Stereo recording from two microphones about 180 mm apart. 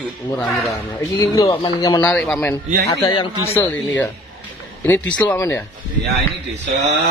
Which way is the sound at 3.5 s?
10° left (ahead or behind).